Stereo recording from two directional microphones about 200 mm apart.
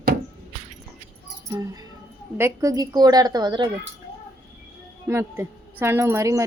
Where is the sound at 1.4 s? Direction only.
20° right (ahead or behind).